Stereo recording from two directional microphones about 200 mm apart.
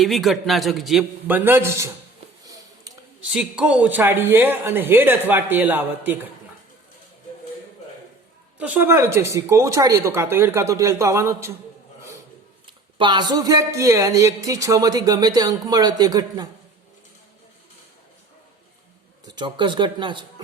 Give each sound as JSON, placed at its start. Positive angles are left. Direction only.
{"t": 0.0, "sound": "a man's voice", "side_deg": 0}
{"t": 2.5, "sound": "a sound", "side_deg": -20}
{"t": 3.3, "sound": "speech", "side_deg": -5}
{"t": 8.5, "sound": "speech", "side_deg": -5}
{"t": 12.6, "sound": "speech", "side_deg": -25}
{"t": 19.2, "sound": "speech", "side_deg": -20}